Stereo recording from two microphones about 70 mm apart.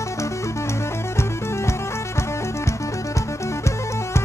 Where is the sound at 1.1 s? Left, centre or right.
Left.